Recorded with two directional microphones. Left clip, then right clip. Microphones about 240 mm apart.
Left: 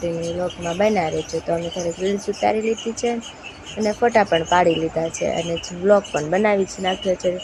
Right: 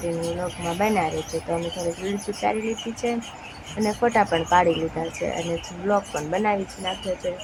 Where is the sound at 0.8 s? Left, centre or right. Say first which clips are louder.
Left 4 dB; centre.